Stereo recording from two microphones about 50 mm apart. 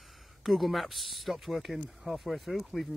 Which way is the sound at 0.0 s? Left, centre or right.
Centre.